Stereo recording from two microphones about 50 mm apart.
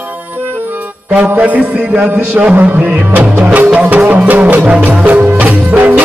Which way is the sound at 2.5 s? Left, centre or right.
Right.